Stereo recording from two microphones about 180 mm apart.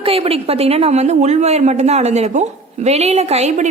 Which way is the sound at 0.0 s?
30° right (ahead or behind).